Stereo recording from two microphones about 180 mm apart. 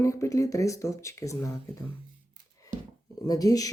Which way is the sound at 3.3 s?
20° left (ahead or behind).